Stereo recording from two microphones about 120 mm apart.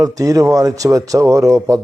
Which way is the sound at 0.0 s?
30° right (ahead or behind).